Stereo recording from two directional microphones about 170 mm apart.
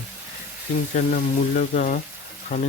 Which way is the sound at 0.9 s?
50° left (ahead or behind).